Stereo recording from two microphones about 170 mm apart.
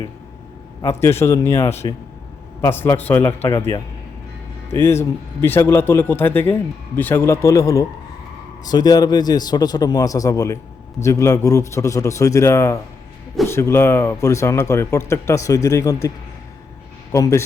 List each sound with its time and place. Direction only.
0.8 s a man's voice: 15° left (ahead or behind)
4.7 s a man's voice: 15° left (ahead or behind)
17.1 s a man's voice: 20° left (ahead or behind)